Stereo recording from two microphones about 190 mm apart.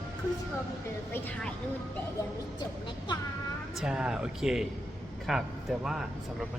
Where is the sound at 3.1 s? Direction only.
25° left (ahead or behind).